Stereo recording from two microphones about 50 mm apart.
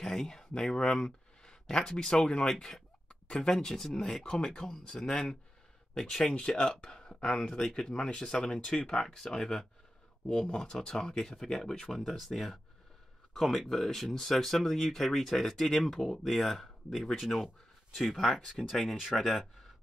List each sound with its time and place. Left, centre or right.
0.0 s speech: centre